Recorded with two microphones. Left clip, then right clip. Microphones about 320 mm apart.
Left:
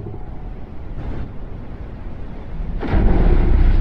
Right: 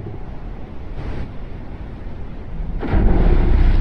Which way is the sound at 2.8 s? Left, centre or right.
Centre.